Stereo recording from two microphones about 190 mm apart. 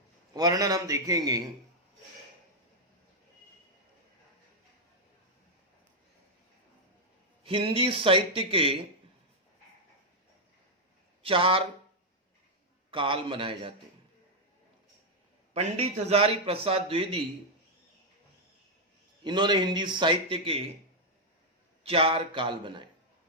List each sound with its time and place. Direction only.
0.3 s a man's voice: 20° right (ahead or behind)
7.4 s a man's voice: 30° right (ahead or behind)
11.2 s speech: 30° right (ahead or behind)
12.9 s a man's voice: 25° right (ahead or behind)
15.5 s a man's voice: 35° right (ahead or behind)
19.2 s a man's voice: 25° right (ahead or behind)
21.8 s a man's voice: 30° right (ahead or behind)